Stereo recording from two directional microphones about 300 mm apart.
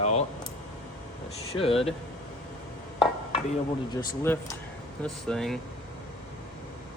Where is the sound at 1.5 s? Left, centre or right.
Centre.